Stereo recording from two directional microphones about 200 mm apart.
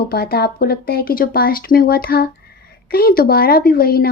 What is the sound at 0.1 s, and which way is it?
Speech, 50° left (ahead or behind).